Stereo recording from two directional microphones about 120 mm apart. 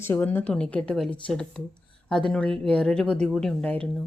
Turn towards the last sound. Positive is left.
turn(degrees=10)  # may be behind; listen again after turning